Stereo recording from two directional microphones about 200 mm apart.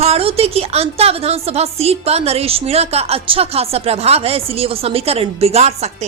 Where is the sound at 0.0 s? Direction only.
30° right (ahead or behind).